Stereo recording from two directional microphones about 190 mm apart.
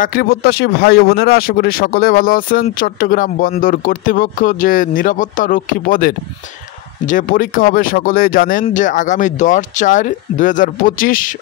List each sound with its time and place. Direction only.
0.0 s speech: 50° left (ahead or behind)